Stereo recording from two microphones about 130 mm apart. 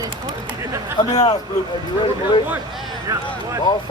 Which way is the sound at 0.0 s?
30° right (ahead or behind).